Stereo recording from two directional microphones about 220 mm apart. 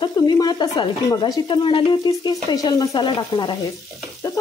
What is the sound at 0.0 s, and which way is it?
Speech, 20° left (ahead or behind).